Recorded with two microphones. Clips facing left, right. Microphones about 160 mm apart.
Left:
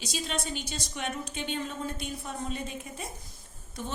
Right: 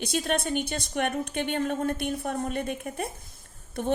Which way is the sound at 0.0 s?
55° right (ahead or behind).